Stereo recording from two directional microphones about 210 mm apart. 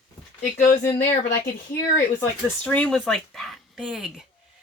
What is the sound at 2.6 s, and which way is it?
Speech, 5° left (ahead or behind).